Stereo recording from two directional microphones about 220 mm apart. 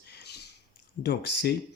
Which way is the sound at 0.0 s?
45° left (ahead or behind).